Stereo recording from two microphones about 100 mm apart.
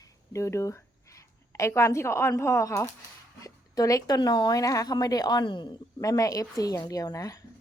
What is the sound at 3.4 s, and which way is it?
Speech, 35° left (ahead or behind).